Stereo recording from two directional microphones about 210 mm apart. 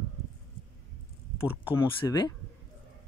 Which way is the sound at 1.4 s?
10° left (ahead or behind).